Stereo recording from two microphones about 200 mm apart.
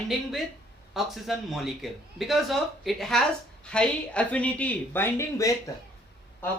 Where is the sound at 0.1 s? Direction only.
Centre (ahead or behind).